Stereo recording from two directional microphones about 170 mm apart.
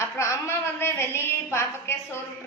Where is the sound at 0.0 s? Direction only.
15° left (ahead or behind).